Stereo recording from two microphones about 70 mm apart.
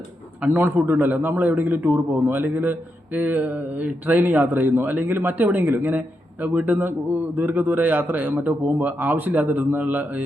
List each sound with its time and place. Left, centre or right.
0.4 s a man's voice: right